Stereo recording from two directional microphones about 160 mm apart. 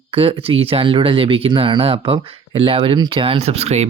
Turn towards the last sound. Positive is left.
turn(degrees=-40)  # may be behind; listen again after turning